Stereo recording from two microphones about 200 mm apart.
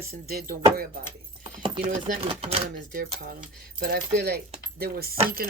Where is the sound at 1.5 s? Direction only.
25° right (ahead or behind).